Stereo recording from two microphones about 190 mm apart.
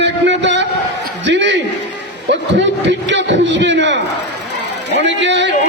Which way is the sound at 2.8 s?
70° right (ahead or behind).